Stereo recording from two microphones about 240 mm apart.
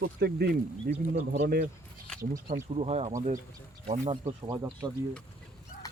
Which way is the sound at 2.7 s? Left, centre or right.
Right.